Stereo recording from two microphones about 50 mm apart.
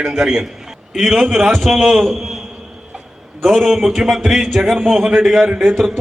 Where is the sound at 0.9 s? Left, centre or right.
Centre.